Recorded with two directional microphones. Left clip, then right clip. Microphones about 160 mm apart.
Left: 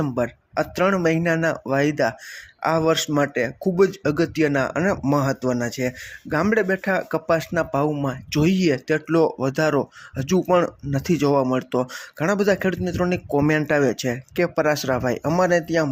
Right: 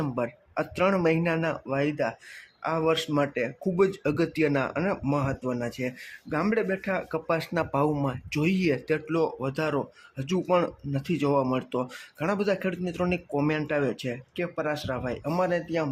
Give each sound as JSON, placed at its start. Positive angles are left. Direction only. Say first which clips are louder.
{"t": 0.0, "sound": "speech", "louder": "left 6 dB", "side_deg": 20}